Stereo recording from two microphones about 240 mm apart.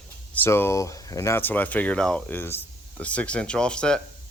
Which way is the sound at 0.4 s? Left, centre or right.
Centre.